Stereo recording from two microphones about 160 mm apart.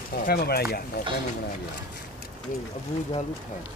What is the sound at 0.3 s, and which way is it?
Speech, 75° left (ahead or behind).